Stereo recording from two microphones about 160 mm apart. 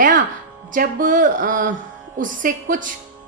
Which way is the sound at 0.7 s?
60° right (ahead or behind).